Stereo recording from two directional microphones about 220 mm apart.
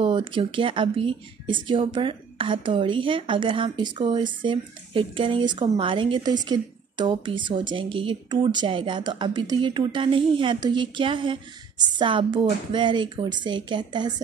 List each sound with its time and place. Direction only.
0.0 s a woman's voice: 20° right (ahead or behind)